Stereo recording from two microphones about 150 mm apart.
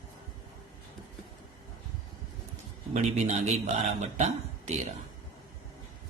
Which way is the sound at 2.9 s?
50° right (ahead or behind).